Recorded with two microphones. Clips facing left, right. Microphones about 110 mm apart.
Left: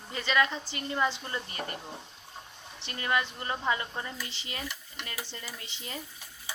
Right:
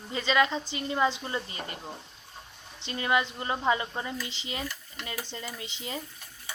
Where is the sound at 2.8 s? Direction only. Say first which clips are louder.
Right 3 dB; 20° right (ahead or behind).